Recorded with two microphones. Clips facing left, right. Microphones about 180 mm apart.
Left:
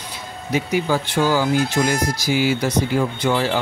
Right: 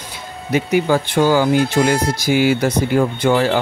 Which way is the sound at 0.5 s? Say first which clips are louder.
Right 4 dB; 60° right (ahead or behind).